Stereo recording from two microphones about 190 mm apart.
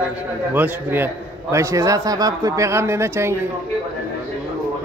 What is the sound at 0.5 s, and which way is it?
A man's voice, 10° right (ahead or behind).